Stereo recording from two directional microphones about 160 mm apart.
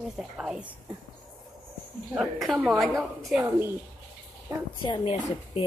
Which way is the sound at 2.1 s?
Centre (ahead or behind).